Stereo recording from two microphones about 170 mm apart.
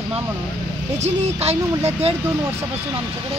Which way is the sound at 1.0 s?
40° right (ahead or behind).